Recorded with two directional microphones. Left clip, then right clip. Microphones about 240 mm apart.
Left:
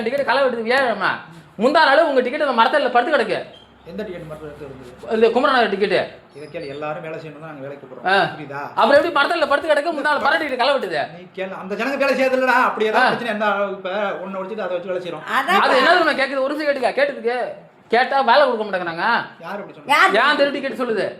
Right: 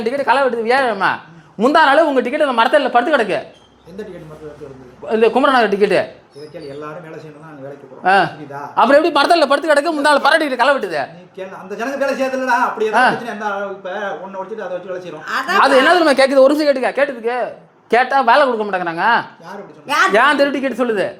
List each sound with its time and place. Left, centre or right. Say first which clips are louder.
0.0 s speech: right 3 dB; right
5.0 s speech: right 3 dB; right
8.0 s a woman's voice: right 4 dB; right
11.3 s a man's voice: left 1 dB; centre
15.3 s a woman's voice: even; centre
15.5 s a woman's voice: right 4 dB; right